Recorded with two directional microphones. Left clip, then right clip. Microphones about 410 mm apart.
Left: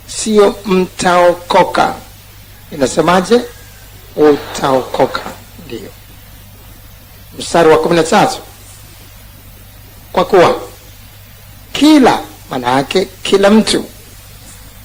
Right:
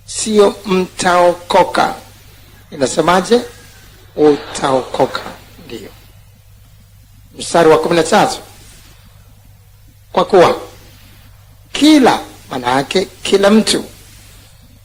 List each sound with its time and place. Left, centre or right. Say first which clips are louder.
0.2 s speech: left 1 dB; centre
7.3 s speech: left 1 dB; centre
10.1 s speech: left 1 dB; centre
11.7 s a woman's voice: left 1 dB; centre